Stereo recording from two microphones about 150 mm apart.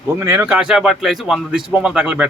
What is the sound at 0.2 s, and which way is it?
A man's voice, 10° right (ahead or behind).